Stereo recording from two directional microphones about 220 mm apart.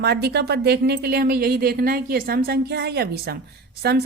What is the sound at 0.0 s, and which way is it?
Speech, 45° right (ahead or behind).